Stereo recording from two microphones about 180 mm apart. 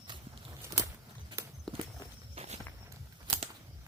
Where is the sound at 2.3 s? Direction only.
35° right (ahead or behind).